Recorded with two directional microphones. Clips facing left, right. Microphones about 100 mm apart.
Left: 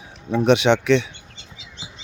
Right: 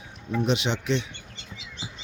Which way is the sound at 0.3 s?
75° left (ahead or behind).